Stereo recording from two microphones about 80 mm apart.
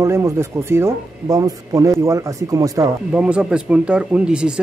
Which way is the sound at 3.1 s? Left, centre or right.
Centre.